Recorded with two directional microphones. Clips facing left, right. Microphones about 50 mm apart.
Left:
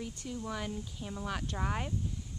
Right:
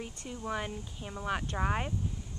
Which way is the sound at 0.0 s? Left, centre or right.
Right.